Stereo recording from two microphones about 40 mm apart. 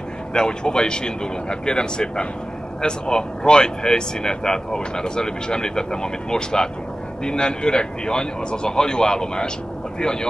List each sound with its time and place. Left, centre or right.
0.3 s speech: left